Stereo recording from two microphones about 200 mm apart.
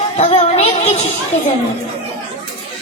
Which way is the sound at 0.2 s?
30° left (ahead or behind).